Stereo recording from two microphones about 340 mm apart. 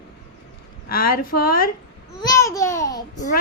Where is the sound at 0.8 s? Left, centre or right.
Left.